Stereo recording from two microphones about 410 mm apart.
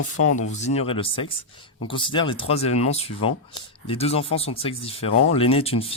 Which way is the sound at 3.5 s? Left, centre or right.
Centre.